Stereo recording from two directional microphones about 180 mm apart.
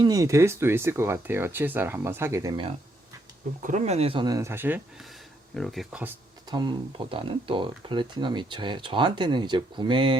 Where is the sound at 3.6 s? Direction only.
45° right (ahead or behind); by 6.1 s 10° right (ahead or behind).